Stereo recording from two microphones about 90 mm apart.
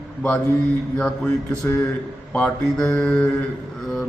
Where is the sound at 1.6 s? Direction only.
35° left (ahead or behind).